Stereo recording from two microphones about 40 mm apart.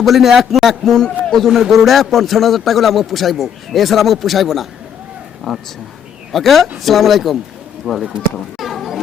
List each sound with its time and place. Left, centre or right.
0.0 s a man's voice: centre
1.2 s a sound: centre
1.5 s a man's voice: centre
5.4 s speech: centre
6.3 s a man's voice: centre
8.5 s children playing: centre